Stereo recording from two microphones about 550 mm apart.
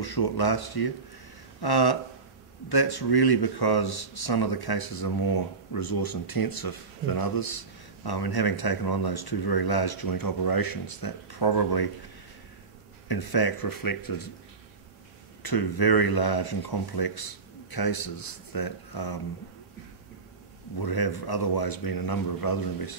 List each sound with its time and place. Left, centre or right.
0.0 s speech: left
13.1 s speech: left
15.4 s speech: left
20.8 s speech: left